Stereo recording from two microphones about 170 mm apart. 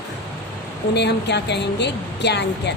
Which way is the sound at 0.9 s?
80° left.